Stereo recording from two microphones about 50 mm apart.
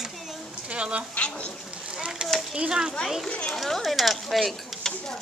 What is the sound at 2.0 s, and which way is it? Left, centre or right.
Speech, centre.